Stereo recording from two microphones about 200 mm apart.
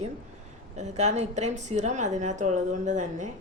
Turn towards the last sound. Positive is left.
turn(degrees=-40)  # may be behind; listen again after turning